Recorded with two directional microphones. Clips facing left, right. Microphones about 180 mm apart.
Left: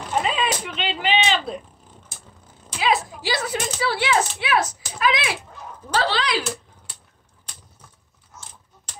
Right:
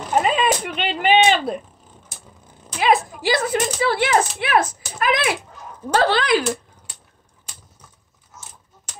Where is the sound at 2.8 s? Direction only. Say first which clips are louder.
Right 4 dB; 50° right (ahead or behind).